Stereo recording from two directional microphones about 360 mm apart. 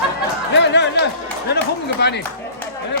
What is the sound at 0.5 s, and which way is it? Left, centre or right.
Music, left.